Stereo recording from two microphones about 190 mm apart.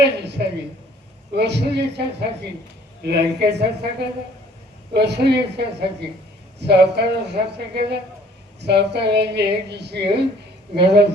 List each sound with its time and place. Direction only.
0.0 s a woman's voice: 60° right (ahead or behind)